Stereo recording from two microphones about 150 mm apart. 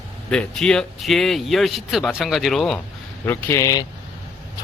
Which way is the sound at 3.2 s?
15° left (ahead or behind).